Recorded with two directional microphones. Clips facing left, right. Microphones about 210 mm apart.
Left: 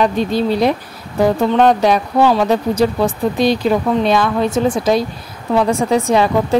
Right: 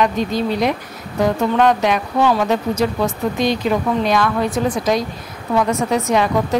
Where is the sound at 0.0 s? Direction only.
30° left (ahead or behind).